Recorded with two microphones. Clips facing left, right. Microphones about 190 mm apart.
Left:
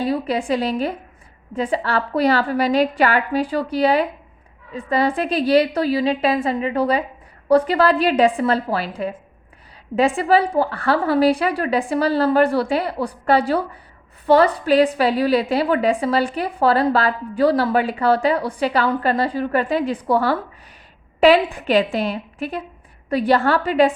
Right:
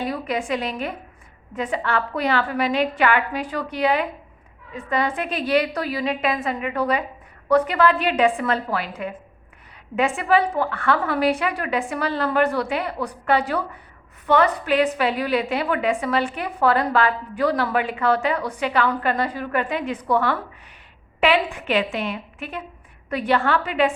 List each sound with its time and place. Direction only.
0.0 s a woman's voice: 35° left (ahead or behind)